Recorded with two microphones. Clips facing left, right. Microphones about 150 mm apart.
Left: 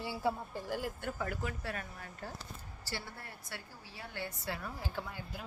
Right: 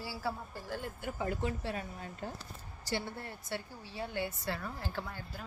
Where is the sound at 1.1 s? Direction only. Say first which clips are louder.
Right 4 dB; 25° right (ahead or behind).